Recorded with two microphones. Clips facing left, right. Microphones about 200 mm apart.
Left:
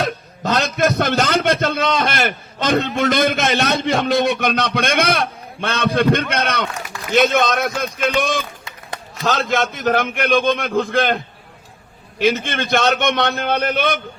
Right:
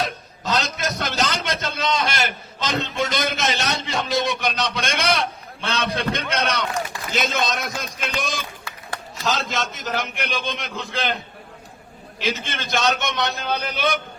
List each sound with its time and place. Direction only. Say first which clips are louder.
0.0 s a man's voice: left 5 dB; 55° left (ahead or behind)
12.2 s a man's voice: left 9 dB; 55° left (ahead or behind)